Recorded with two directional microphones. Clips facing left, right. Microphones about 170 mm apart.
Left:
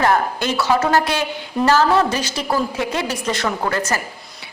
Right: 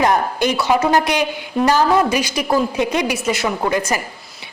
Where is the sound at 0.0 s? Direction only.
15° right (ahead or behind).